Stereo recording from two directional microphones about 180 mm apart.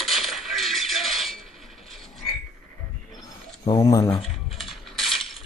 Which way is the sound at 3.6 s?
20° left (ahead or behind).